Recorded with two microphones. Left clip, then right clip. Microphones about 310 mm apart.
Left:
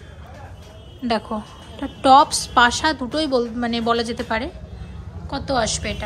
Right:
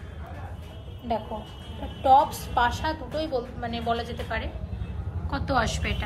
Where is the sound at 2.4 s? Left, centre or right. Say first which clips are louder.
Left 9 dB; left.